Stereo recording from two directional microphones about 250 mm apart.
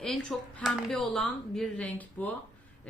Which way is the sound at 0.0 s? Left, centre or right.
Centre.